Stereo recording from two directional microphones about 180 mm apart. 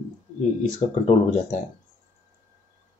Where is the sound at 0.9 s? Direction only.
35° left (ahead or behind).